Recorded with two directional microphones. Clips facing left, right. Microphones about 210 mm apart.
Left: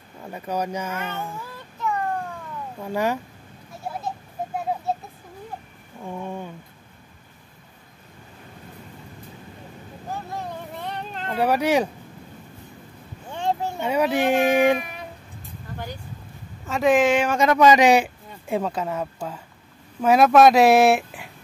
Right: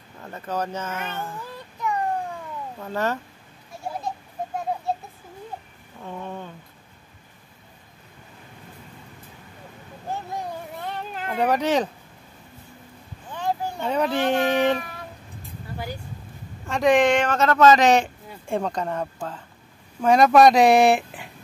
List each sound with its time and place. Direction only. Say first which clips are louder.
0.2 s speech: left 1 dB; 10° left (ahead or behind)
2.8 s speech: left 2 dB; 10° left (ahead or behind)
6.0 s speech: left 2 dB; 10° left (ahead or behind)
10.8 s a sound: even; centre (ahead or behind)
11.3 s speech: left 1 dB; 10° left (ahead or behind)
13.3 s a sound: left 2 dB; 25° left (ahead or behind)
13.7 s speech: left 2 dB; 10° left (ahead or behind)
14.8 s a sound: left 2 dB; 20° left (ahead or behind)
16.6 s speech: even; centre (ahead or behind)